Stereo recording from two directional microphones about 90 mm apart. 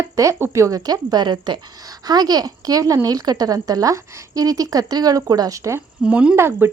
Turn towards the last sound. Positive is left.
turn(degrees=-30)  # may be behind; listen again after turning